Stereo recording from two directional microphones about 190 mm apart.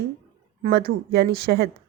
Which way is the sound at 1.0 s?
55° right (ahead or behind).